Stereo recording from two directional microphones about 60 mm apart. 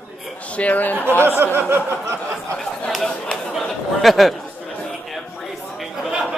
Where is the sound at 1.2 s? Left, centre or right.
Right.